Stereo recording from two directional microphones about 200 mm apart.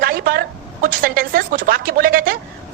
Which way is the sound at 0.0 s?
45° right (ahead or behind).